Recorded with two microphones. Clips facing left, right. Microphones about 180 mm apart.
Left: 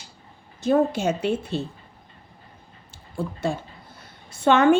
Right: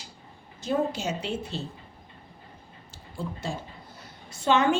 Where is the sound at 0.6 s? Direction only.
55° left (ahead or behind).